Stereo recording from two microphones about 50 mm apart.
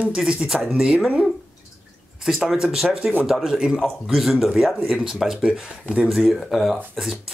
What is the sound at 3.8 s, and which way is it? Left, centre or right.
Speech, centre.